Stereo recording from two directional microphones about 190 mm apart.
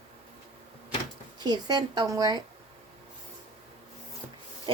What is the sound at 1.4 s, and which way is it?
Speech, 20° right (ahead or behind).